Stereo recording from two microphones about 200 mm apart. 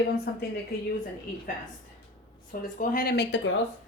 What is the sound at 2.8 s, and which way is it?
Speech, 45° left (ahead or behind).